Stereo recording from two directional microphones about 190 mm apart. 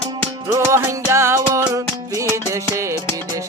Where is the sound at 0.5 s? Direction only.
15° right (ahead or behind).